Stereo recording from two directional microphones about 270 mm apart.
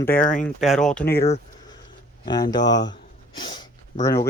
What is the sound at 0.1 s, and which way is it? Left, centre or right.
Speech, left.